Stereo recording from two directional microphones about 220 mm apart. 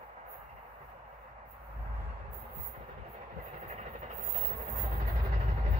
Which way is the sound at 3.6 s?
30° right (ahead or behind).